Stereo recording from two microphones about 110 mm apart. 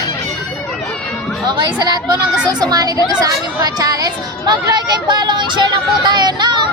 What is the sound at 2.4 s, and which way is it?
Speech, 40° right (ahead or behind).